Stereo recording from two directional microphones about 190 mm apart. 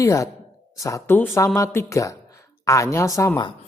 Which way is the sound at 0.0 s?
15° left (ahead or behind).